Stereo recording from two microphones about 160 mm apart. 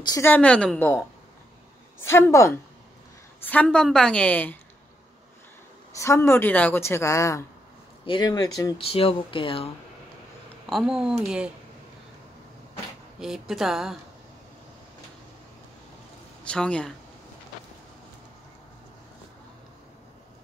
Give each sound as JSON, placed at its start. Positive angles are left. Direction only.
{"t": 0.2, "sound": "a woman's voice", "side_deg": 10}
{"t": 5.9, "sound": "a woman's voice", "side_deg": 15}
{"t": 8.0, "sound": "speech", "side_deg": 30}
{"t": 8.7, "sound": "speech", "side_deg": 35}
{"t": 10.7, "sound": "a woman's voice", "side_deg": -5}
{"t": 13.2, "sound": "a woman's voice", "side_deg": 0}
{"t": 16.4, "sound": "a woman's voice", "side_deg": 5}